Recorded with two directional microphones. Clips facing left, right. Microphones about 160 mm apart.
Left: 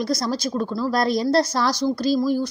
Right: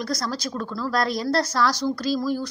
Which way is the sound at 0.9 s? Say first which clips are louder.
Left 4 dB; 20° left (ahead or behind).